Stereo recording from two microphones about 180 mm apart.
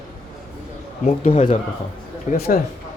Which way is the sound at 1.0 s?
40° left (ahead or behind).